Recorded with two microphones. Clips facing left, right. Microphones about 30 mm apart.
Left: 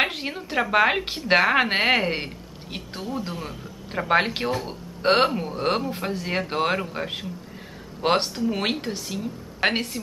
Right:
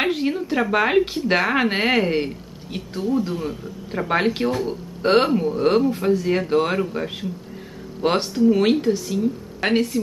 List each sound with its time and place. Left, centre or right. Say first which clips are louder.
0.0 s a woman's voice: right 4 dB; centre